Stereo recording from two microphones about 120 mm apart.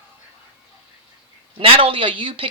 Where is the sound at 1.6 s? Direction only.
50° right (ahead or behind).